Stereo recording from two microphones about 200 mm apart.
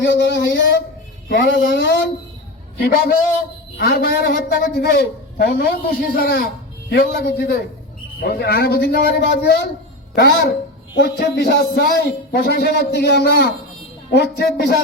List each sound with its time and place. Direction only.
0.0 s a man's voice: 60° left (ahead or behind)